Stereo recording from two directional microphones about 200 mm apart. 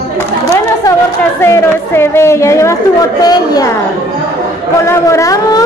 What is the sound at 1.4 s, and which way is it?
A woman's voice, 10° left (ahead or behind).